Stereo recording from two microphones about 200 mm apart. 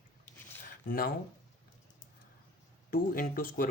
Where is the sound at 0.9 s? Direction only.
45° left (ahead or behind).